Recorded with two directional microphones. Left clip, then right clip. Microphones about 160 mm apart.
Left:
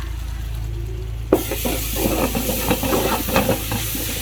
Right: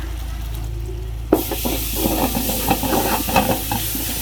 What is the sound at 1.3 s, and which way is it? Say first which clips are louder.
Stir: even; 5° left (ahead or behind).